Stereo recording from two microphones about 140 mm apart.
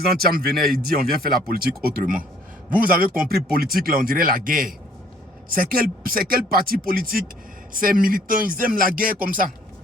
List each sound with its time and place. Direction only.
0.2 s speech: 90° right